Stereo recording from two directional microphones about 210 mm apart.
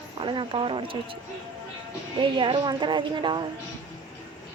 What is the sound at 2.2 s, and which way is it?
Speech, 25° right (ahead or behind).